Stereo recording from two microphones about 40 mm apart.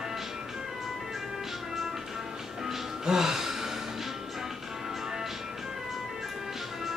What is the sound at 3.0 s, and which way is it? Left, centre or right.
Gasp, centre.